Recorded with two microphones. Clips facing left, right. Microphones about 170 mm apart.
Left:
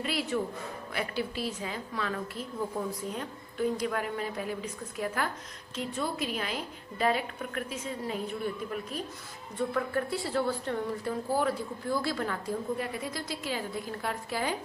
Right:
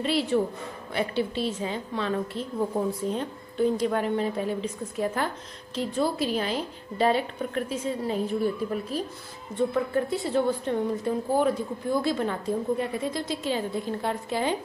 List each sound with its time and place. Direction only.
0.0 s a woman's voice: 30° right (ahead or behind)
9.6 s a woman's voice: 20° right (ahead or behind)